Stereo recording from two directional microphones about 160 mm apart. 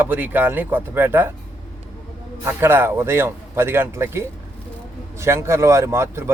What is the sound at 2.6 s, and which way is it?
Speech, 15° right (ahead or behind).